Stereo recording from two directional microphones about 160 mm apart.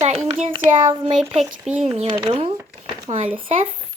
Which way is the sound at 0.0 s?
40° right (ahead or behind).